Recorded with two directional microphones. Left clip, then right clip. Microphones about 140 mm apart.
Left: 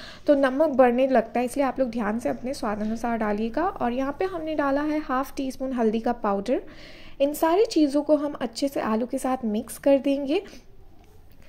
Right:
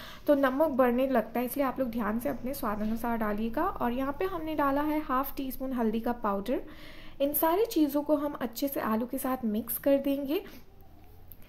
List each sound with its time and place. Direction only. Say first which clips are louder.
0.0 s a woman's voice: left 5 dB; 20° left (ahead or behind)